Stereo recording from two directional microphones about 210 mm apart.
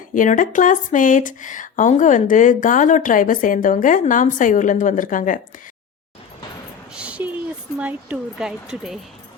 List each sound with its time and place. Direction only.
0.1 s speech: 40° left (ahead or behind)
6.9 s a sound: 5° right (ahead or behind)
7.8 s speech: 5° right (ahead or behind)